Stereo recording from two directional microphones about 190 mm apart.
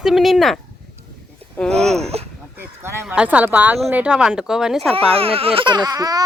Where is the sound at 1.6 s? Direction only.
5° left (ahead or behind).